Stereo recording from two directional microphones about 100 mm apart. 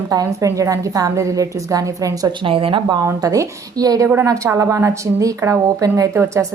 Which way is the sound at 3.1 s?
35° right (ahead or behind).